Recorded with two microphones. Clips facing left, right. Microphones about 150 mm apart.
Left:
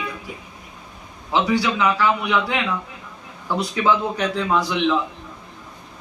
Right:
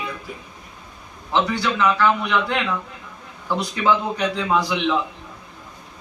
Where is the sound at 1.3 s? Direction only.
10° left (ahead or behind).